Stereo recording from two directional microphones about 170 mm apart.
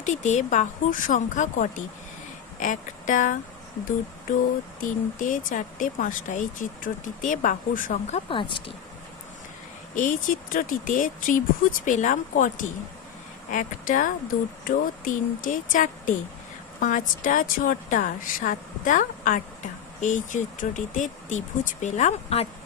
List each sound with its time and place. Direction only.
0.0 s a woman's voice: 45° left (ahead or behind)
4.8 s a woman's voice: 50° left (ahead or behind)
8.3 s speech: 30° left (ahead or behind)
9.9 s a woman's voice: 50° left (ahead or behind)